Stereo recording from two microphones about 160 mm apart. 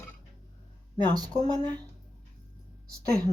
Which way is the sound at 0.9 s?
25° right (ahead or behind).